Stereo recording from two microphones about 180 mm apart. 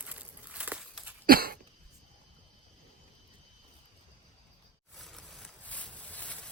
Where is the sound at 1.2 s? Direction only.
55° right (ahead or behind).